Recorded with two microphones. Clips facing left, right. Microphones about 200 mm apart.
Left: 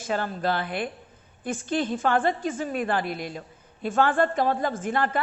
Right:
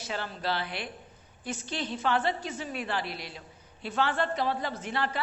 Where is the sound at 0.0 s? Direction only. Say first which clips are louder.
Left 7 dB; 50° left (ahead or behind).